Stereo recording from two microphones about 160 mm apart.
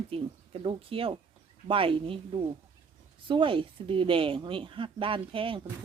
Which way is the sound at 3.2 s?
30° right (ahead or behind).